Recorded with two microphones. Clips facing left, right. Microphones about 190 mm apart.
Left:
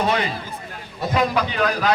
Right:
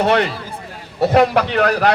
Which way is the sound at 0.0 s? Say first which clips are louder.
Right 6 dB; 70° right (ahead or behind).